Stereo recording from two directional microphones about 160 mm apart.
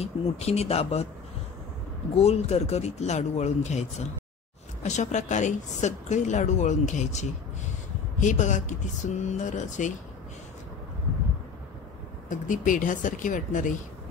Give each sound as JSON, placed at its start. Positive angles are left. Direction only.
{"t": 0.0, "sound": "speech", "side_deg": 40}
{"t": 2.1, "sound": "speech", "side_deg": 40}
{"t": 4.8, "sound": "speech", "side_deg": 50}
{"t": 12.3, "sound": "speech", "side_deg": 55}